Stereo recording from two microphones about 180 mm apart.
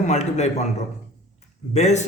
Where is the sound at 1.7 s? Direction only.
40° left (ahead or behind).